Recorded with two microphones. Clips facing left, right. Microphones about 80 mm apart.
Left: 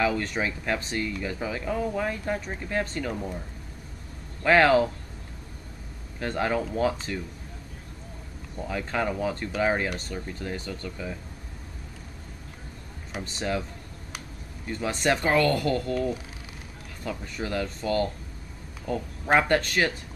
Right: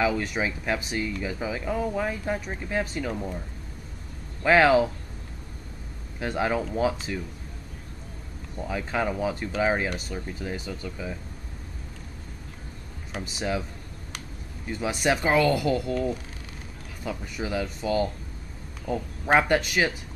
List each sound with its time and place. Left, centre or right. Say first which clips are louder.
0.0 s speech: right 1 dB; centre
4.4 s speech: right 1 dB; centre
6.1 s speech: right 1 dB; centre
8.5 s speech: right 1 dB; centre
13.2 s speech: even; centre
14.7 s speech: even; centre